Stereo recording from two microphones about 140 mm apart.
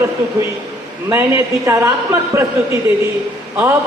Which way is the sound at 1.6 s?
20° right (ahead or behind).